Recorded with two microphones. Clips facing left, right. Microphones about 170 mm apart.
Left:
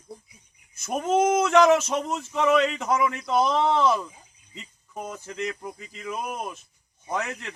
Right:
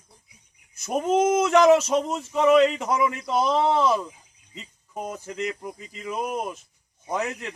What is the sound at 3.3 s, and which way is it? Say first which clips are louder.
Speech: even; 5° right (ahead or behind).